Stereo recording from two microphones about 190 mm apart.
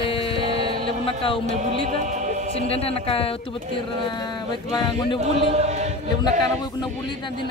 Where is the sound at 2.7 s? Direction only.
30° left (ahead or behind).